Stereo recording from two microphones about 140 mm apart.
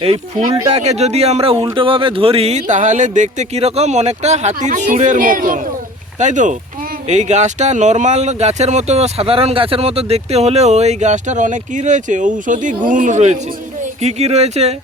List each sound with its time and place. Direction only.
0.0 s speech: 40° right (ahead or behind); by 5.5 s 80° right
6.1 s speech: 60° right (ahead or behind)